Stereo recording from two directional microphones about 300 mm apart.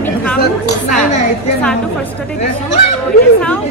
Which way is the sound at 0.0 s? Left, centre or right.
Centre.